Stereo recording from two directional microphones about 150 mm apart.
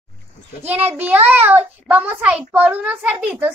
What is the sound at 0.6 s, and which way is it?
Speech, 45° right (ahead or behind).